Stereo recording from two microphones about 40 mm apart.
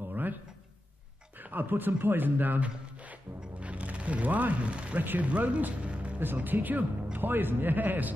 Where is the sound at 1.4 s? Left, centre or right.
Right.